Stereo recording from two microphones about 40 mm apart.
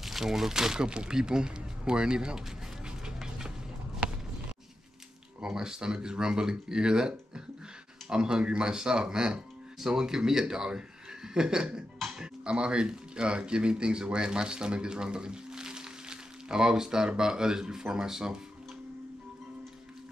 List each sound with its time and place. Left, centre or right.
0.0 s speech: centre
5.4 s speech: centre